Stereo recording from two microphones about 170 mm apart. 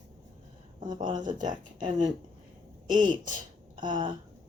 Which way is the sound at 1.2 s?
50° right (ahead or behind).